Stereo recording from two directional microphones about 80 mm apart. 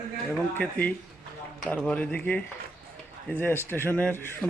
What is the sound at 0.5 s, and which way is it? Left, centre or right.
Speech, centre.